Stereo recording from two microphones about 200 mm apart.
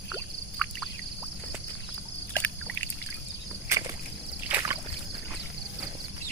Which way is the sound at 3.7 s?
15° right (ahead or behind).